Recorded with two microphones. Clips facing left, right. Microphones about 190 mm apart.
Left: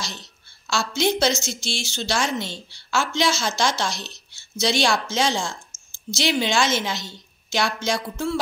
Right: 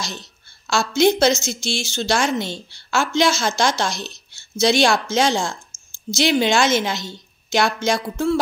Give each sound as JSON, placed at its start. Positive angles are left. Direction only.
{"t": 0.7, "sound": "a woman's voice", "side_deg": -50}